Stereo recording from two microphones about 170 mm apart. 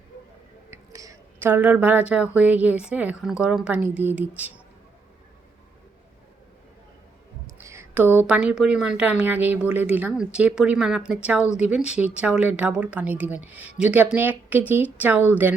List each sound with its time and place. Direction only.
0.7 s a woman's voice: 20° right (ahead or behind)
7.4 s a woman's voice: 15° right (ahead or behind)